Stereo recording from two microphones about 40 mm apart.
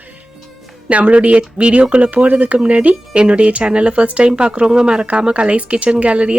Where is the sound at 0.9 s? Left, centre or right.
Right.